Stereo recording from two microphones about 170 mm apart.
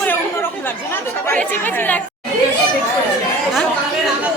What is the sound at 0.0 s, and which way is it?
Chatter, 10° left (ahead or behind).